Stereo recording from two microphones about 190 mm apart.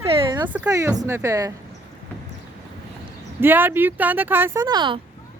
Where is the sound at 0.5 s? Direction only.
10° right (ahead or behind).